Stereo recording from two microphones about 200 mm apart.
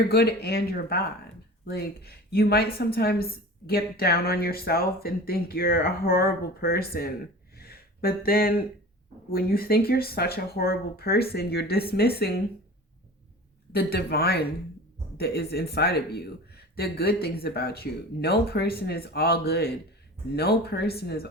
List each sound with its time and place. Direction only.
0.1 s a woman's voice: 50° left (ahead or behind)
7.5 s a sound: 50° left (ahead or behind)
9.3 s a woman's voice: 50° left (ahead or behind)
13.7 s a woman's voice: 50° left (ahead or behind)